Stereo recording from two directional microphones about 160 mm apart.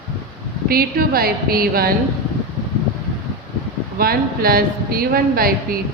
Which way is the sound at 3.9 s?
70° right (ahead or behind).